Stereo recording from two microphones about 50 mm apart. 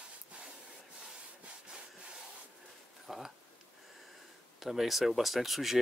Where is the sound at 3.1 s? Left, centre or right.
Centre.